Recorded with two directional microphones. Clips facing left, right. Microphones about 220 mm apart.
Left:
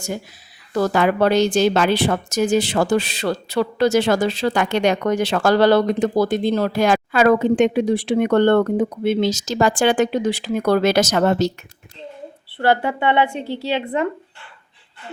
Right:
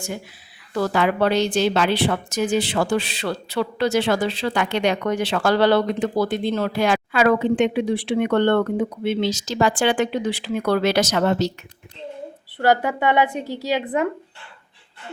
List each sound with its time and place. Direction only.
0.7 s speech: 45° left (ahead or behind)
12.6 s a woman's voice: 10° right (ahead or behind)